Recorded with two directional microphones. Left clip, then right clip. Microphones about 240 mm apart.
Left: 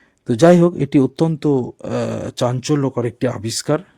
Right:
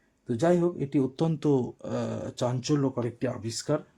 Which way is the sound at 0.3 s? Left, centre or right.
Left.